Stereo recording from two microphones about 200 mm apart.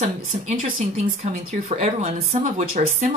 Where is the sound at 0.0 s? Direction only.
35° right (ahead or behind).